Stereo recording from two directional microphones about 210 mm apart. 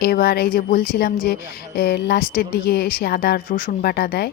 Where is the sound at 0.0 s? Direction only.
45° left (ahead or behind).